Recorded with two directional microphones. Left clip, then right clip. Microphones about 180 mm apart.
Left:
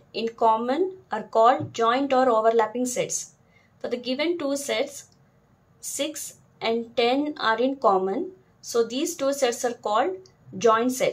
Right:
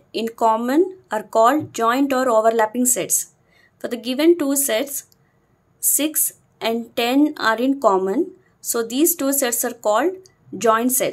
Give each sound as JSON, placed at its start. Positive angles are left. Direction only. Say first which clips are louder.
{"t": 0.1, "sound": "a woman's voice", "louder": "right 3 dB", "side_deg": -55}